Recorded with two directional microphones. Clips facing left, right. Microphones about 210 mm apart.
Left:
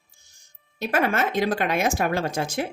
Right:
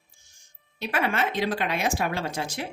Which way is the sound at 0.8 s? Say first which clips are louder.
Left 3 dB; 45° left (ahead or behind).